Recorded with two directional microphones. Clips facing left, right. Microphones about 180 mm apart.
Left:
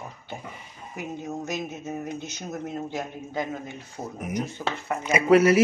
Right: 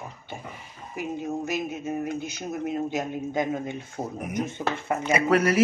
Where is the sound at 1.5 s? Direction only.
10° right (ahead or behind).